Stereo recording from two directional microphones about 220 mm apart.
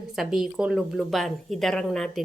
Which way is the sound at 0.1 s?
Centre (ahead or behind).